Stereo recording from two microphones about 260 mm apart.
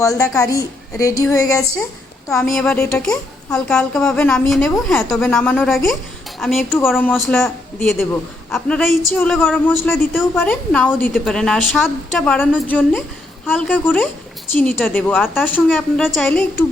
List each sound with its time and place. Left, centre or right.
0.0 s a woman's voice: centre